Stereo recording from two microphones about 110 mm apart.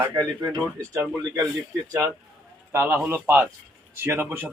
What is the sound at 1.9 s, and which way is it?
A man's voice, 25° right (ahead or behind).